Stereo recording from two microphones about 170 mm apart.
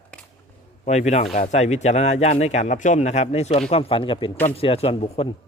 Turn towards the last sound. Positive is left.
turn(degrees=35)  # may be behind; listen again after turning